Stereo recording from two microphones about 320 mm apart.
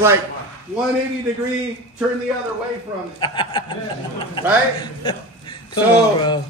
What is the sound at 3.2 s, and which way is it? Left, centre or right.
Speech, centre.